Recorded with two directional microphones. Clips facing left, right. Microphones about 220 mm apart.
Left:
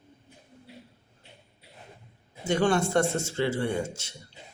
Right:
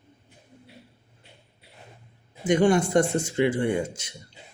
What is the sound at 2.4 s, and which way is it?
Speech, 15° right (ahead or behind).